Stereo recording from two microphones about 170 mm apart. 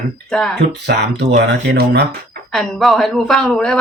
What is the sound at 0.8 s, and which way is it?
Speech, 80° right.